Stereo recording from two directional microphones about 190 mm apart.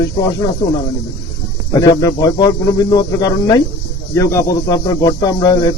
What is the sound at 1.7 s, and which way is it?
Speech, 20° left (ahead or behind).